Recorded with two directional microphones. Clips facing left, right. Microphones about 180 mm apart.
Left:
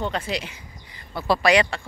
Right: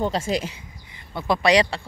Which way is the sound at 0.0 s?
45° right (ahead or behind).